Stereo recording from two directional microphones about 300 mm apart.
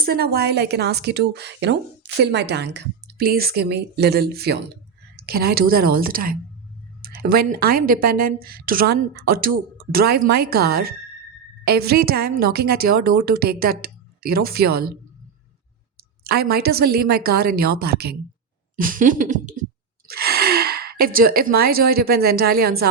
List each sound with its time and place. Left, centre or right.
0.0 s a woman's voice: right
16.2 s a woman's voice: right
18.8 s a sound: right
20.1 s gasp: right
21.0 s a woman's voice: right